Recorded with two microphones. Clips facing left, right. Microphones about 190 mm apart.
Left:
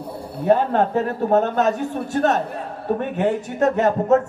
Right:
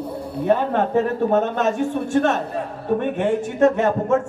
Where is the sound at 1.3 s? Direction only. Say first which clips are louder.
Left 4 dB; 40° left (ahead or behind).